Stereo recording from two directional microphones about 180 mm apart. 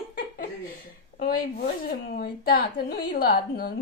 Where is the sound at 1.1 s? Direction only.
55° left (ahead or behind).